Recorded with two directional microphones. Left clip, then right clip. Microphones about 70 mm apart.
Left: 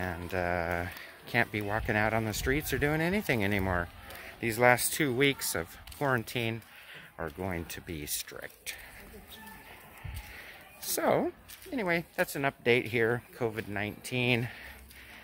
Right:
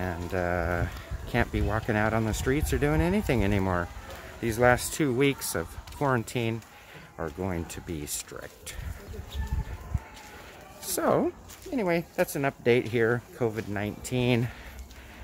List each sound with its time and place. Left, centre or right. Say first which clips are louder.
0.0 s speech: right 3 dB; centre
4.4 s speech: right 2 dB; left
4.7 s speech: right 2 dB; centre
5.6 s speech: right 3 dB; centre
10.8 s speech: right 3 dB; centre
13.4 s speech: right 3 dB; centre